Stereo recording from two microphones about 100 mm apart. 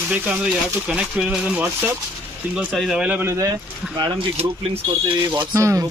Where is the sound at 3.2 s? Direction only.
35° right (ahead or behind).